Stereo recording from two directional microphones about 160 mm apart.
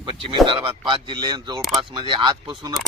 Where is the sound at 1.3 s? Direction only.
30° right (ahead or behind).